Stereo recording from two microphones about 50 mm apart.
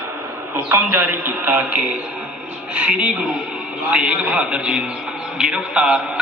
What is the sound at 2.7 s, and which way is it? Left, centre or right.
A man's voice, right.